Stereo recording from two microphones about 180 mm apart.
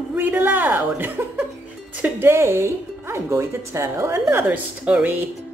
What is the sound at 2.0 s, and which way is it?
Speech, 10° right (ahead or behind).